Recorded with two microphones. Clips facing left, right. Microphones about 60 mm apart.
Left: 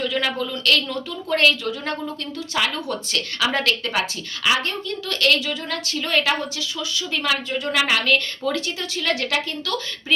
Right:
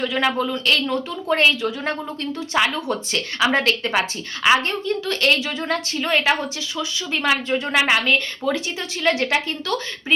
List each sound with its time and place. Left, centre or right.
0.0 s a woman's voice: right